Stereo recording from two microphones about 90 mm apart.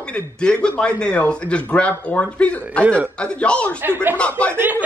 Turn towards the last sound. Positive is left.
turn(degrees=-20)  # may be behind; listen again after turning